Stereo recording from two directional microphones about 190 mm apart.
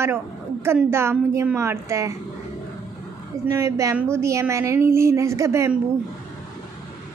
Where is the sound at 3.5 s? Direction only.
15° right (ahead or behind).